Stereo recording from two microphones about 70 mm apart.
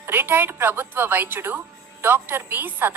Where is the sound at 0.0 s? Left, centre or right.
Right.